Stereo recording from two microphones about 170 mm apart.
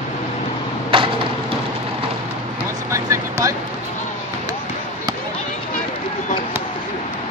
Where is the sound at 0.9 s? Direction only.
30° right (ahead or behind).